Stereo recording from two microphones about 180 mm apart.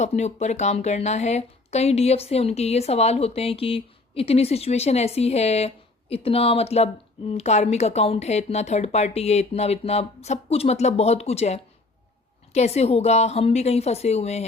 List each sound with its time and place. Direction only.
0.0 s speech: 40° left (ahead or behind)